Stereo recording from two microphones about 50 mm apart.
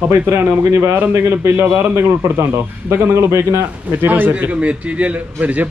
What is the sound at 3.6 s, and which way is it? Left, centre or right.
Speech, right.